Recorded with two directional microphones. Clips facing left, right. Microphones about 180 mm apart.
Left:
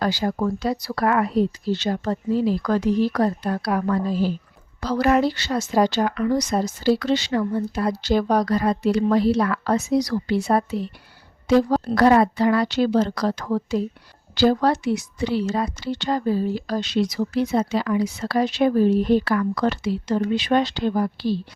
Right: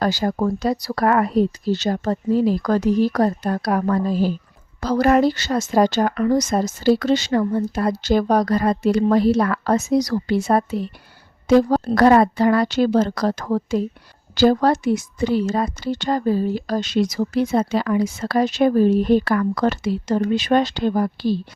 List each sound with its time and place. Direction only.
0.0 s a woman's voice: 45° right (ahead or behind)